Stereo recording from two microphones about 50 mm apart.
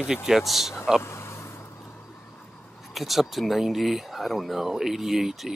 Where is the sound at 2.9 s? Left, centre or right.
Centre.